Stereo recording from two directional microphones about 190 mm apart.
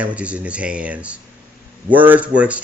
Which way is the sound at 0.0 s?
5° right (ahead or behind).